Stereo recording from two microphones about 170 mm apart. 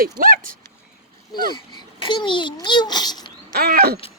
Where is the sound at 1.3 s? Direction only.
25° left (ahead or behind).